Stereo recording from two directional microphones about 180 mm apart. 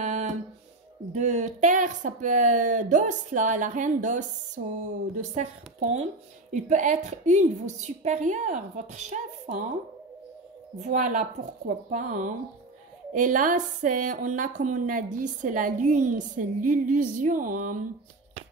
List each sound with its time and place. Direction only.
0.0 s a sound: 40° right (ahead or behind)
1.1 s a woman's voice: 40° right (ahead or behind)
4.6 s speech: 60° right (ahead or behind)
5.1 s a woman's voice: 40° right (ahead or behind)
10.8 s a woman's voice: 45° right (ahead or behind)